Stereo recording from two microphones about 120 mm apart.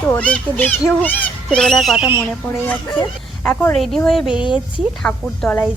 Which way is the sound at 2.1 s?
20° left (ahead or behind).